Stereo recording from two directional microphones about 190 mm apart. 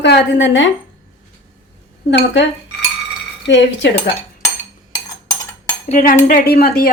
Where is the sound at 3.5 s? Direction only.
70° left (ahead or behind).